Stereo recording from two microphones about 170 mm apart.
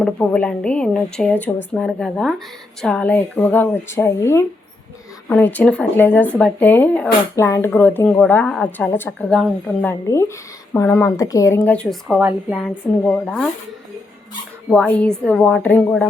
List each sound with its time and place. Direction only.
0.0 s a woman's voice: 5° left (ahead or behind)
10.1 s a woman's voice: 15° left (ahead or behind)
14.7 s a woman's voice: 5° left (ahead or behind)